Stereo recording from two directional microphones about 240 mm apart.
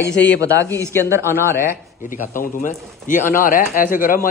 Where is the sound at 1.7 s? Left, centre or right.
Left.